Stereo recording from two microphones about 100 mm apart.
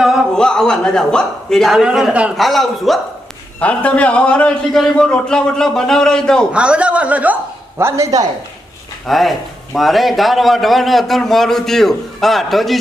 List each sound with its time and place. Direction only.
0.3 s a man's voice: 5° left (ahead or behind); by 2.3 s 10° right (ahead or behind)
2.4 s a man's voice: centre (ahead or behind)
3.6 s a man's voice: 15° left (ahead or behind)
6.5 s speech: 10° right (ahead or behind)
7.8 s a man's voice: 30° right (ahead or behind)
9.0 s a man's voice: centre (ahead or behind)